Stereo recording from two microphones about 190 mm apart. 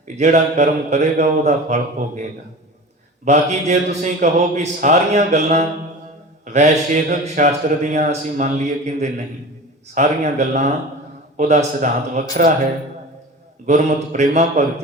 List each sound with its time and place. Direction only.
0.2 s a man's voice: 40° right (ahead or behind)
3.2 s a man's voice: 40° right (ahead or behind)
6.4 s mantra: 40° right (ahead or behind)
7.1 s a man's voice: 40° right (ahead or behind)
13.7 s a man's voice: 40° right (ahead or behind)